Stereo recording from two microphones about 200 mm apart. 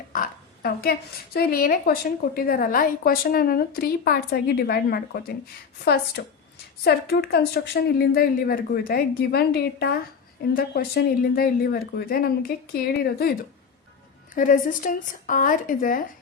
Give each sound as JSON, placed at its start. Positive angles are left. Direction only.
{"t": 0.1, "sound": "a woman's voice", "side_deg": 45}
{"t": 14.3, "sound": "a woman's voice", "side_deg": 40}